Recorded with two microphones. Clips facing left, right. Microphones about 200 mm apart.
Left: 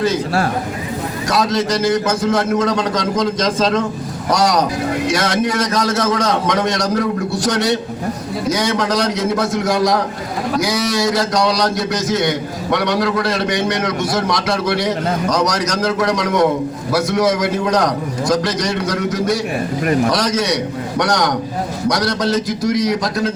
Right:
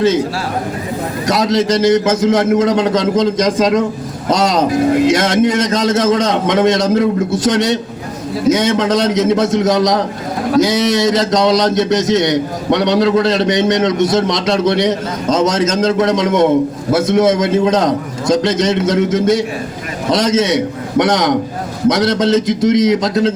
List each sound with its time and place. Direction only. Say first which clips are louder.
1.3 s a man's voice: right 4 dB; 20° right (ahead or behind)